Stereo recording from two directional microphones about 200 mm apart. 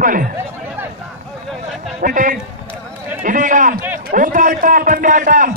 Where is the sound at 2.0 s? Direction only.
40° right (ahead or behind).